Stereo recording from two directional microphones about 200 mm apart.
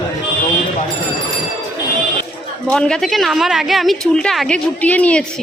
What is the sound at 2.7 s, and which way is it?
A woman's voice, 5° left (ahead or behind).